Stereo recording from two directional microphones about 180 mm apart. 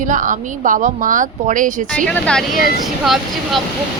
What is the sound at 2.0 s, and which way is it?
Speech, 5° left (ahead or behind).